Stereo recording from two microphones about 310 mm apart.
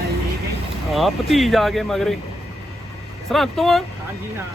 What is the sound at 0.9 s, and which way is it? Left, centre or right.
Speech, centre.